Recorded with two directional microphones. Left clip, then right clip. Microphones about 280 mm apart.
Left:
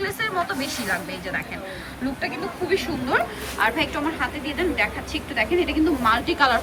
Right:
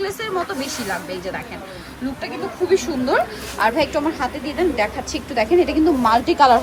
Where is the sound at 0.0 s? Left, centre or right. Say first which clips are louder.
Right 1 dB; centre.